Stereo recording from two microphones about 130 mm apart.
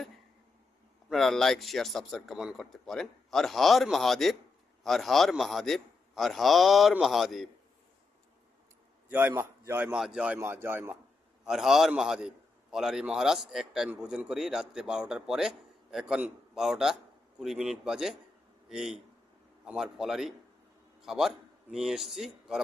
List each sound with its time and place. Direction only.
1.1 s a man's voice: 5° left (ahead or behind)
9.0 s a man's voice: 15° right (ahead or behind)
11.4 s a man's voice: 5° right (ahead or behind)